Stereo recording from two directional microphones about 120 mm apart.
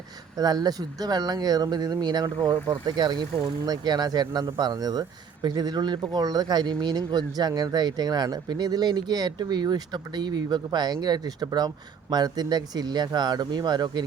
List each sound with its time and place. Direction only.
0.3 s speech: 35° right (ahead or behind)